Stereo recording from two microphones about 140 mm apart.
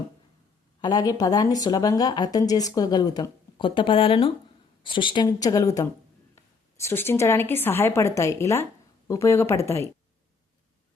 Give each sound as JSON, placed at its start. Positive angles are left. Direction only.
{"t": 0.8, "sound": "a woman's voice", "side_deg": 30}